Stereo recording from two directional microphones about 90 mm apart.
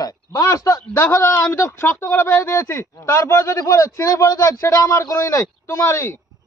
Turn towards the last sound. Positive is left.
turn(degrees=30)  # may be behind; listen again after turning